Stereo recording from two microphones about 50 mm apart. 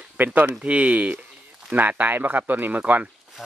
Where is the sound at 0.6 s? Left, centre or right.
Right.